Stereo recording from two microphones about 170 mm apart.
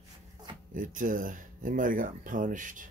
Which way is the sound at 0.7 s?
50° right (ahead or behind).